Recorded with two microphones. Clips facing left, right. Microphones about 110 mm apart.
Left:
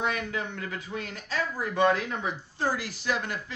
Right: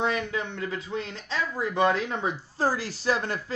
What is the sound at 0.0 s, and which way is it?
Speech, 25° right (ahead or behind).